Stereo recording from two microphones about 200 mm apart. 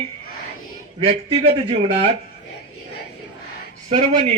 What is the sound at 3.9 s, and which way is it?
Speech, 35° right (ahead or behind).